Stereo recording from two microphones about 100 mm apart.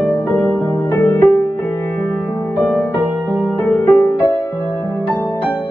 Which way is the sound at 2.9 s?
20° right (ahead or behind).